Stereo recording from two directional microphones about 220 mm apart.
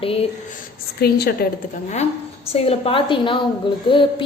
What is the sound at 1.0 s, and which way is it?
Speech, 45° left (ahead or behind).